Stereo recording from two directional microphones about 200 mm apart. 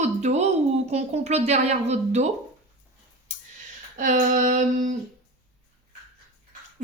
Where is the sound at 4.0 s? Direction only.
40° right (ahead or behind).